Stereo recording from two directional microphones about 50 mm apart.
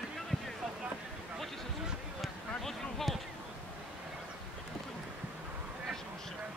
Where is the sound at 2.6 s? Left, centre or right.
Centre.